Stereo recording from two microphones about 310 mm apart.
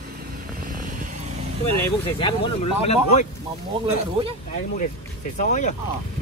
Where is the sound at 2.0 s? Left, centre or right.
Centre.